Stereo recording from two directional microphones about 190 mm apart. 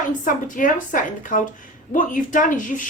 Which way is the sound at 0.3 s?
45° left (ahead or behind).